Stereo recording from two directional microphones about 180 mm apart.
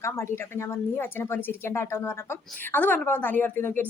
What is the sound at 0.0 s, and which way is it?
A woman's voice, 15° left (ahead or behind).